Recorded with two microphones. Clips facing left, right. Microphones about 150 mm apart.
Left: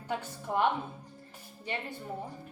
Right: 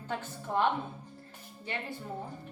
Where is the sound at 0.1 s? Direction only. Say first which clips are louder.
Left 1 dB; 10° left (ahead or behind).